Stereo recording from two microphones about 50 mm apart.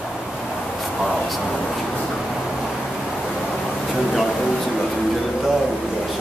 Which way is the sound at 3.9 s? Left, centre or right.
Centre.